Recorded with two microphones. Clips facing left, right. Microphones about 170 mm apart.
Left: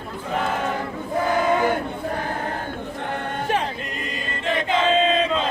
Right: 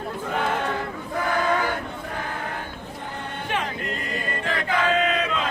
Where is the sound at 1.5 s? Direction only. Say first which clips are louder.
Left 5 dB; 20° left (ahead or behind).